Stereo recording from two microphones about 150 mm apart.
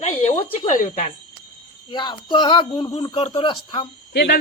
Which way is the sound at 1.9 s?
30° left (ahead or behind).